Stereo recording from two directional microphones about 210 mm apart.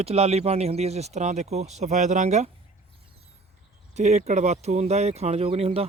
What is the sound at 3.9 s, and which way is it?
Speech, 35° right (ahead or behind).